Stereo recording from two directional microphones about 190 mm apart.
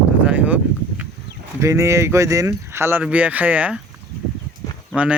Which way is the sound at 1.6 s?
15° right (ahead or behind).